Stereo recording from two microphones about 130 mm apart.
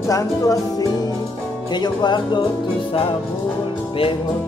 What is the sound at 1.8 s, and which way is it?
Speech, 35° left (ahead or behind).